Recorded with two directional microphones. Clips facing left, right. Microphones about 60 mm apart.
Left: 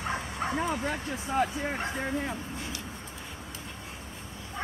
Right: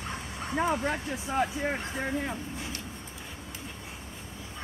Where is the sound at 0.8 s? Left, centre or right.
Centre.